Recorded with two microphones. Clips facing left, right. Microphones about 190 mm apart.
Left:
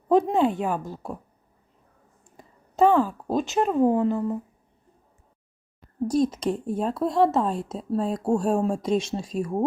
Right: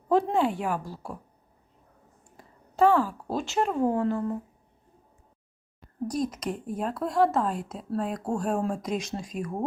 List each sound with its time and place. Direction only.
0.1 s speech: 20° left (ahead or behind)
2.3 s speech: 20° left (ahead or behind)
6.1 s speech: 25° left (ahead or behind)